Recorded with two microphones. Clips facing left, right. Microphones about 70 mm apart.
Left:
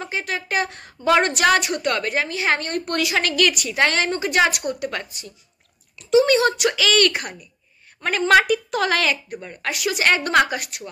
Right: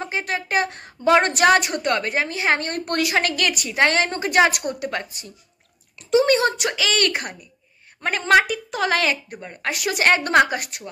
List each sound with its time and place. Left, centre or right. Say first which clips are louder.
0.0 s a woman's voice: right 1 dB; right
4.8 s a woman's voice: even; right
6.6 s a woman's voice: left 3 dB; right
9.7 s a woman's voice: right 1 dB; right